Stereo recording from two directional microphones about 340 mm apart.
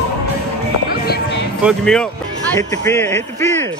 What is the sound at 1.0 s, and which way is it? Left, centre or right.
Music, left.